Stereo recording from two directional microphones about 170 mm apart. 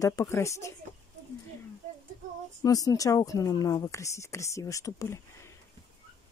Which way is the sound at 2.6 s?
20° left (ahead or behind).